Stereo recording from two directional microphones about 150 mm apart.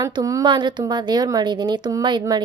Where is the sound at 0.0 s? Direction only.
25° right (ahead or behind).